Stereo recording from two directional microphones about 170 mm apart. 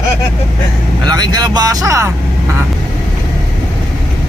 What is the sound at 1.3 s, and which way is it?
Speech, 25° right (ahead or behind).